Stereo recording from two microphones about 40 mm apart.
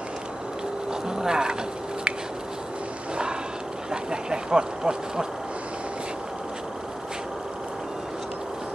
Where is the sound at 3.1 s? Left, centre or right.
Right.